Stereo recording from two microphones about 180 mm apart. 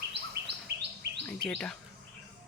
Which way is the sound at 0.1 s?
70° right (ahead or behind).